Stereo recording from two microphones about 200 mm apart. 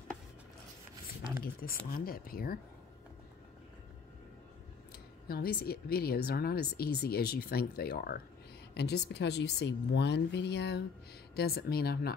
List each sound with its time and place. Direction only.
1.4 s speech: 45° left (ahead or behind)
4.9 s speech: 50° left (ahead or behind)